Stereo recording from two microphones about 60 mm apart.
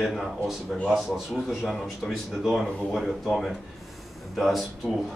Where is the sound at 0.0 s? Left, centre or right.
Centre.